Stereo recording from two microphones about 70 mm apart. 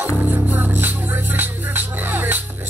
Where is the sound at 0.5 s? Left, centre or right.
Right.